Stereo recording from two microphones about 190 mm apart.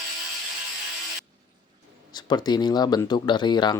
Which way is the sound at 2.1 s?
20° left (ahead or behind).